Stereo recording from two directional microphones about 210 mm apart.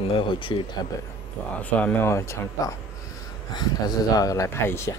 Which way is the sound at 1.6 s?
5° left (ahead or behind).